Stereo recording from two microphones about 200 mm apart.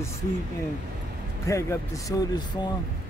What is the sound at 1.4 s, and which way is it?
Speech, 15° left (ahead or behind).